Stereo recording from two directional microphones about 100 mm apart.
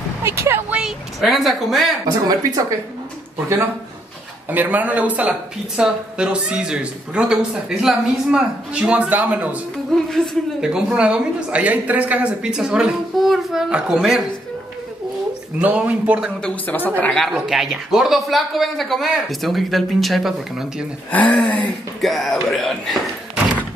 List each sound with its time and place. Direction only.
0.2 s a woman's voice: 25° right (ahead or behind)
0.7 s speech: 5° right (ahead or behind)
2.0 s speech: 40° right (ahead or behind)
3.3 s a woman's voice: 25° right (ahead or behind)
10.0 s speech: 5° left (ahead or behind)
10.6 s speech: 5° right (ahead or behind)
15.6 s speech: 15° right (ahead or behind)
16.4 s speech: 15° left (ahead or behind)
17.0 s speech: 5° left (ahead or behind)
21.1 s speech: 15° left (ahead or behind)
22.0 s speech: centre (ahead or behind)